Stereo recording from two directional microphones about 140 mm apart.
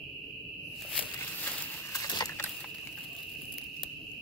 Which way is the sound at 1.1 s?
15° left (ahead or behind).